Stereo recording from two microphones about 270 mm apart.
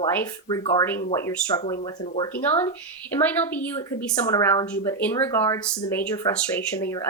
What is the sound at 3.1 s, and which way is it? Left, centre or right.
A woman's voice, centre.